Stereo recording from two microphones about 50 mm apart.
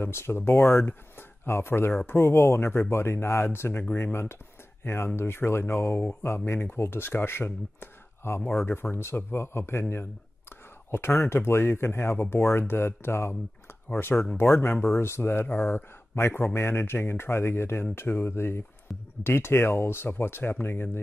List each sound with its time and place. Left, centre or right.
0.0 s speech: left
0.5 s speech: left
0.8 s a sound: left
1.5 s speech: left
3.4 s speech: left
14.3 s speech: left
15.2 s speech: left
15.6 s speech: left